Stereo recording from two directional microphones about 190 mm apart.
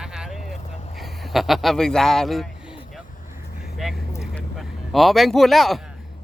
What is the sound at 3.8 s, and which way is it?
Vehicle, centre (ahead or behind).